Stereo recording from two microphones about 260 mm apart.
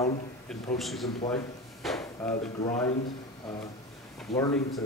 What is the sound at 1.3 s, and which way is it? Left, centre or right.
Drawer open or close, centre.